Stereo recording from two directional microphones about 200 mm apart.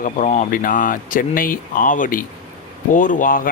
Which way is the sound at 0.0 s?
40° left (ahead or behind).